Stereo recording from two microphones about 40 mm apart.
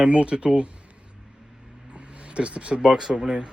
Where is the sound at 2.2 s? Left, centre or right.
Right; by 3.4 s centre.